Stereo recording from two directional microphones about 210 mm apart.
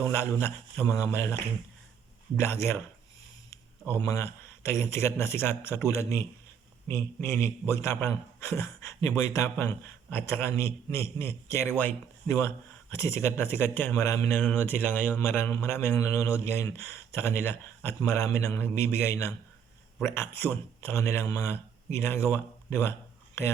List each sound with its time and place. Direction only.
0.0 s speech: 10° left (ahead or behind)
3.9 s speech: 15° left (ahead or behind)
22.3 s a sound: 10° left (ahead or behind)